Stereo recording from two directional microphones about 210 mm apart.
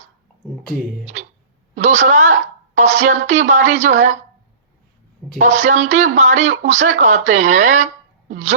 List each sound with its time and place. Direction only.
1.0 s a sound: 35° right (ahead or behind)
1.7 s speech: 35° right (ahead or behind)
5.4 s a woman's voice: 35° right (ahead or behind)